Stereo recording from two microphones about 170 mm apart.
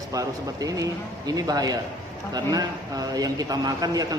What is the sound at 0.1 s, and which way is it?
A man's voice, 20° right (ahead or behind).